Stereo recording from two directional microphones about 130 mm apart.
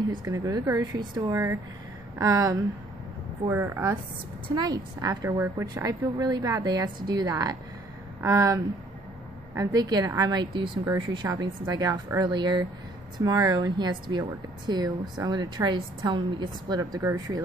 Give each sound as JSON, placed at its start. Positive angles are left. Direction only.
{"t": 0.1, "sound": "speech", "side_deg": -30}
{"t": 5.4, "sound": "speech", "side_deg": -20}
{"t": 5.9, "sound": "a woman's voice", "side_deg": -30}